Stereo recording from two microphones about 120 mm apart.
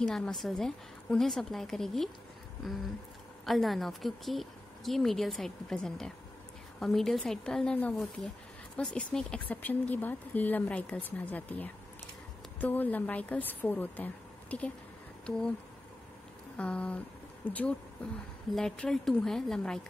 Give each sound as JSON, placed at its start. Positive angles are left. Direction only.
{"t": 0.0, "sound": "a woman's voice", "side_deg": 5}
{"t": 3.4, "sound": "a woman's voice", "side_deg": 0}
{"t": 16.5, "sound": "a woman's voice", "side_deg": 10}